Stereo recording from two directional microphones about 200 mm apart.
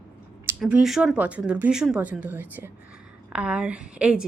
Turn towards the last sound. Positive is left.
turn(degrees=-5)  # may be behind; listen again after turning